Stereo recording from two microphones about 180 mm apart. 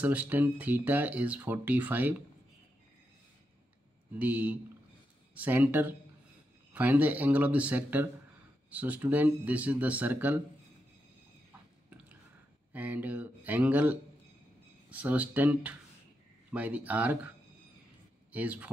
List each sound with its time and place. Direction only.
0.0 s speech: 10° right (ahead or behind)
4.2 s speech: 10° right (ahead or behind)
12.7 s speech: 10° right (ahead or behind)
18.3 s speech: 5° right (ahead or behind)